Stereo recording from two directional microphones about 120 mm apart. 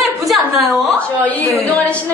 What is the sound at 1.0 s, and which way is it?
A woman's voice, 15° left (ahead or behind).